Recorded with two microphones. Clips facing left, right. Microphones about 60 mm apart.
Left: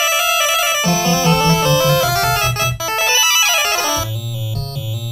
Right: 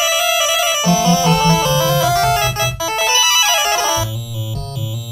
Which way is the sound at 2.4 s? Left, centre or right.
Left.